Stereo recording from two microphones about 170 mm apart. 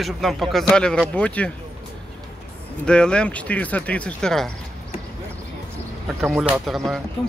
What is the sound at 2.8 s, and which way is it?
Speech, 5° left (ahead or behind).